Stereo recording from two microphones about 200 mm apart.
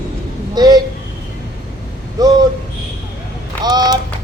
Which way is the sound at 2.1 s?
20° right (ahead or behind).